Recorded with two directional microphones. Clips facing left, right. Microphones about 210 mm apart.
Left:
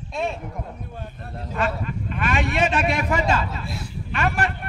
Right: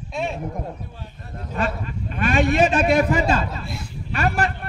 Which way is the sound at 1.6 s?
35° right (ahead or behind).